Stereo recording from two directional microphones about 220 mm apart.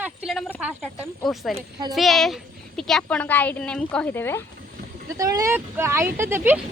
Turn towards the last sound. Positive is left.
turn(degrees=-10)  # may be behind; listen again after turning